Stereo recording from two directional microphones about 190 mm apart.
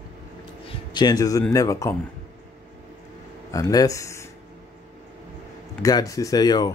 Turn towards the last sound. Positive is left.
turn(degrees=20)  # may be behind; listen again after turning